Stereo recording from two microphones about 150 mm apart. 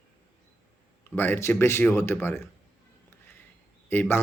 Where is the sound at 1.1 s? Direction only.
15° left (ahead or behind).